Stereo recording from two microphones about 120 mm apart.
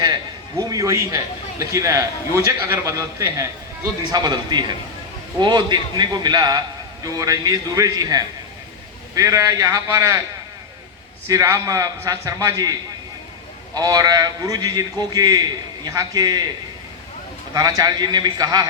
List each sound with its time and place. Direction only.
0.6 s a man's voice: 30° right (ahead or behind)
4.1 s a man's voice: 35° right (ahead or behind)
11.3 s a man's voice: 30° right (ahead or behind)
13.7 s a man's voice: 30° right (ahead or behind)
17.5 s a man's voice: 30° right (ahead or behind)